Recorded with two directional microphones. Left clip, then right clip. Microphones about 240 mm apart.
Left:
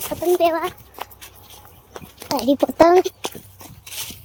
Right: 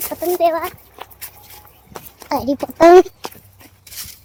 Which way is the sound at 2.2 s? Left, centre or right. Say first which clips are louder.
Right 3 dB; left.